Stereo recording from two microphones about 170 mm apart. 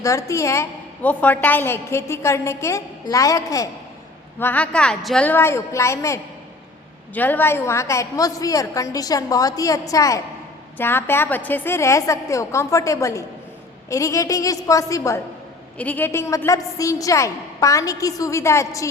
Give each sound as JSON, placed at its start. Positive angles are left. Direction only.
{"t": 0.0, "sound": "a woman's voice", "side_deg": 20}
{"t": 4.4, "sound": "a woman's voice", "side_deg": 10}